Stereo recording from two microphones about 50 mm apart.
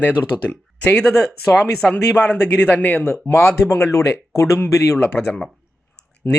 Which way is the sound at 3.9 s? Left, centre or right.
Left.